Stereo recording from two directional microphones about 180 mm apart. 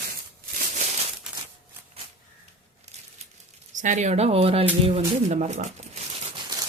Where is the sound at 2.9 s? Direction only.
40° right (ahead or behind).